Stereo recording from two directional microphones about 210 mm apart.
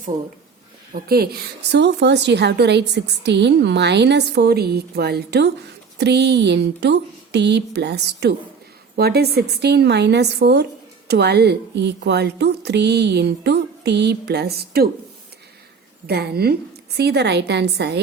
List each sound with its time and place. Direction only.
0.9 s a woman's voice: 45° right (ahead or behind)
16.0 s a woman's voice: 50° right (ahead or behind)